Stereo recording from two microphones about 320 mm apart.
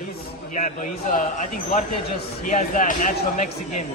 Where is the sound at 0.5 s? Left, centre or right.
Left.